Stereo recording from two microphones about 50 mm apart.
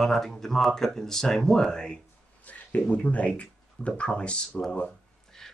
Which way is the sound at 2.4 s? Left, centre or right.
Left.